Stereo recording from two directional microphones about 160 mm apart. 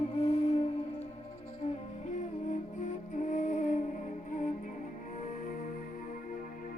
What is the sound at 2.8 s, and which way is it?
Music, 50° left (ahead or behind).